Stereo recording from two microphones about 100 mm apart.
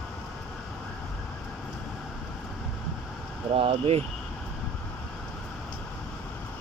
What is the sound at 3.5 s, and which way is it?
Speech, 75° right (ahead or behind).